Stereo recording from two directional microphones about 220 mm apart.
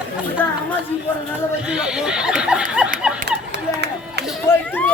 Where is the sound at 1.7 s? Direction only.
5° right (ahead or behind).